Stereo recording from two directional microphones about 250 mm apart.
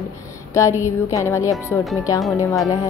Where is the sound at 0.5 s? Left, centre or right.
Centre.